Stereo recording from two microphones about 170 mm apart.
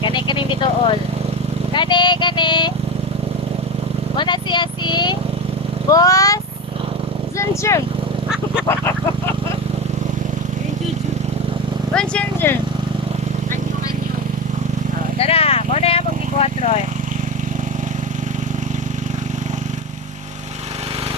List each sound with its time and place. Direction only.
0.0 s vehicle: 25° left (ahead or behind)
1.7 s speech: 25° left (ahead or behind)
4.2 s speech: 25° left (ahead or behind)
11.9 s speech: 10° left (ahead or behind)
15.2 s vehicle: 35° left (ahead or behind)